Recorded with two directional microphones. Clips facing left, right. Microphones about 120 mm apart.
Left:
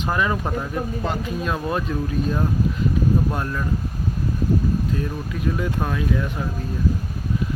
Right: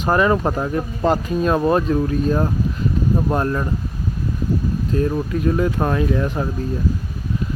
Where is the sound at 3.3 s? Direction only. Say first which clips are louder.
Right 6 dB; 40° right (ahead or behind).